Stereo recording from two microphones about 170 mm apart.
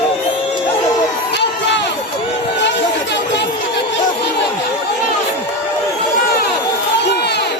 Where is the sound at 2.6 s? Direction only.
90° left.